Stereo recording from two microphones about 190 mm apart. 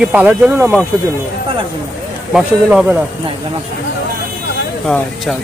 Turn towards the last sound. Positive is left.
turn(degrees=5)  # may be behind; listen again after turning